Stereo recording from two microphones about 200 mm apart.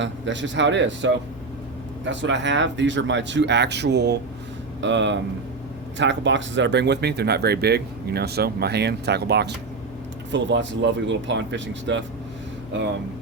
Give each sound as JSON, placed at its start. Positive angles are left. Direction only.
{"t": 0.0, "sound": "speech", "side_deg": -65}